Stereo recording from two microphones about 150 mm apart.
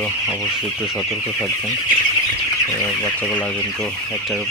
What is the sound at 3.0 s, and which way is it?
Speech, 5° left (ahead or behind).